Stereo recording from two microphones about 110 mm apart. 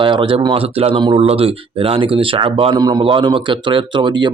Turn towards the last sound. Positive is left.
turn(degrees=-45)  # may be behind; listen again after turning